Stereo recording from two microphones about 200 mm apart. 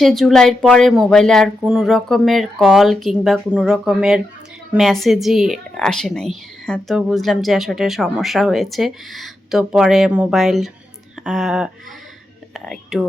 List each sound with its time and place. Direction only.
0.0 s a woman's voice: centre (ahead or behind)